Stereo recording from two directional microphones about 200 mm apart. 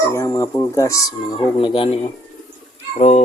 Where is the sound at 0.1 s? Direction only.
15° left (ahead or behind).